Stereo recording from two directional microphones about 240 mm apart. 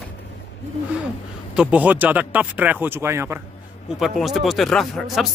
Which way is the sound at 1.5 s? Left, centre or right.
Centre.